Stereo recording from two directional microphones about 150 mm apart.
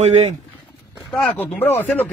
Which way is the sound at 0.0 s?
45° right (ahead or behind).